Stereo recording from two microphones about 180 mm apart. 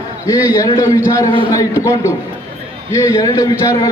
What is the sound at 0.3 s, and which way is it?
A man's voice, 20° left (ahead or behind).